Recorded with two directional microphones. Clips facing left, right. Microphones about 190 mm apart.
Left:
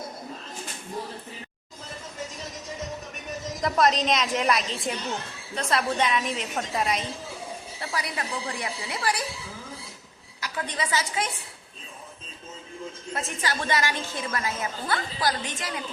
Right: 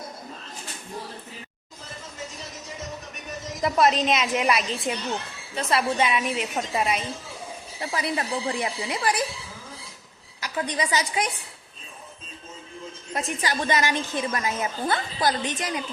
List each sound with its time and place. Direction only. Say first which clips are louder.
3.6 s a woman's voice: right 2 dB; 5° right (ahead or behind)
7.8 s a woman's voice: right 5 dB; 25° right (ahead or behind)
10.4 s a woman's voice: right 4 dB; 15° right (ahead or behind)
13.1 s a woman's voice: right 3 dB; 15° right (ahead or behind)